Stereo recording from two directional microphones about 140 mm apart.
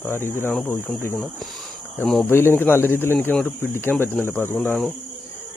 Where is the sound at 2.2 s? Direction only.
15° left (ahead or behind).